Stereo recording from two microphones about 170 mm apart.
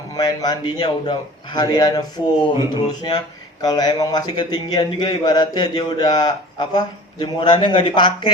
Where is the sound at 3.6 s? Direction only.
25° left (ahead or behind).